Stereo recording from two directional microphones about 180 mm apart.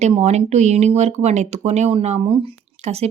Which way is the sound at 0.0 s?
35° right (ahead or behind).